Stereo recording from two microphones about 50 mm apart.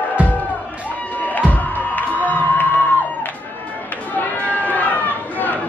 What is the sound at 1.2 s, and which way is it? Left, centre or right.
Music, left.